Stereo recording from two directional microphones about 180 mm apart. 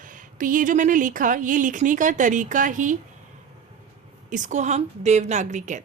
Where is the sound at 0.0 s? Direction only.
45° right (ahead or behind).